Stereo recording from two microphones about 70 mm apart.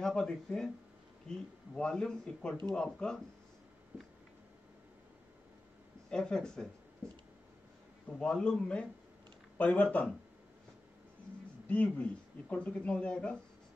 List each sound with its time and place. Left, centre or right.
0.0 s speech: centre
1.8 s speech: centre
6.0 s speech: centre
8.2 s speech: centre
11.6 s speech: centre